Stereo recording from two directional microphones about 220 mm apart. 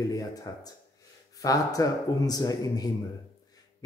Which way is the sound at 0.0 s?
15° left (ahead or behind).